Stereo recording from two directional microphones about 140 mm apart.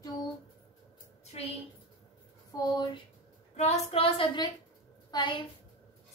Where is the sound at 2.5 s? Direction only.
30° left (ahead or behind).